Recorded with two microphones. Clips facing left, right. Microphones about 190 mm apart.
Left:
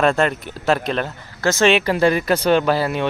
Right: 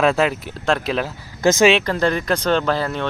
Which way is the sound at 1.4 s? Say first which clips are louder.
Right 3 dB; 15° right (ahead or behind).